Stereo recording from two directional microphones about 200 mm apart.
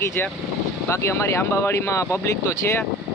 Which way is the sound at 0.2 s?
10° left (ahead or behind).